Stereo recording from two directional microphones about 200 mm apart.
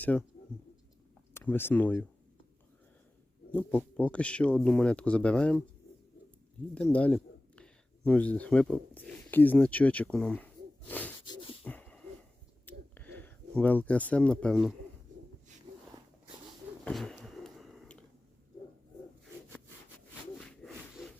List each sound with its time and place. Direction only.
0.0 s speech: 5° left (ahead or behind)
1.3 s speech: 10° left (ahead or behind)
3.5 s speech: 10° left (ahead or behind)
6.9 s speech: 5° left (ahead or behind)
10.8 s gasp: 10° left (ahead or behind)
11.3 s beatboxing: 25° left (ahead or behind)
11.6 s a sound: 5° left (ahead or behind)
16.8 s a sound: centre (ahead or behind)
20.4 s sawing: 5° left (ahead or behind)